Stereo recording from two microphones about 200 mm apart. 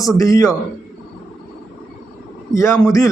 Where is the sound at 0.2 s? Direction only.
15° left (ahead or behind).